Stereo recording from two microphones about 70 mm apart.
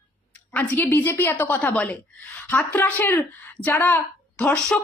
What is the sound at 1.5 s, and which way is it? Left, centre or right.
A woman's voice, centre.